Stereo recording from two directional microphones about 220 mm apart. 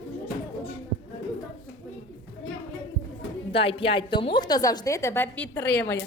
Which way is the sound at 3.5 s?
25° left (ahead or behind).